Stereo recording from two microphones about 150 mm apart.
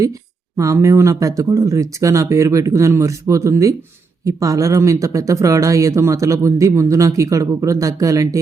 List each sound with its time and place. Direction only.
0.5 s speech: 20° right (ahead or behind)